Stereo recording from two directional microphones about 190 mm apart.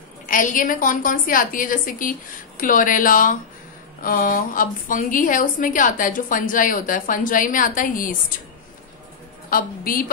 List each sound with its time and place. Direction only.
0.3 s a woman's voice: 45° left (ahead or behind)
9.5 s a woman's voice: 50° left (ahead or behind)